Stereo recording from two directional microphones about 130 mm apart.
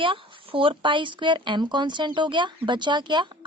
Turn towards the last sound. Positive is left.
turn(degrees=-35)  # may be behind; listen again after turning